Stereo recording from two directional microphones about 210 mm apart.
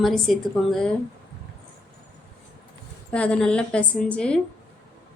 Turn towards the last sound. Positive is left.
turn(degrees=5)  # may be behind; listen again after turning